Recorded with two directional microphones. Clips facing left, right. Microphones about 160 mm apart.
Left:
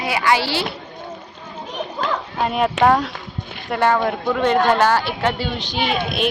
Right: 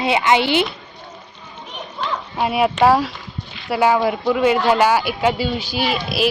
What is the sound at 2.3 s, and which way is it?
A woman's voice, 5° right (ahead or behind).